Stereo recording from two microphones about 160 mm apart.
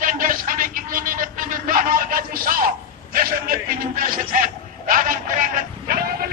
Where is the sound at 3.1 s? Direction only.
65° right (ahead or behind).